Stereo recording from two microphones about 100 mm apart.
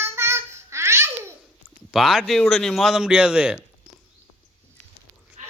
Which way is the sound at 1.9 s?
Centre (ahead or behind).